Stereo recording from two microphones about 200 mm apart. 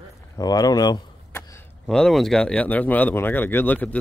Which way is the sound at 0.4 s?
20° left (ahead or behind).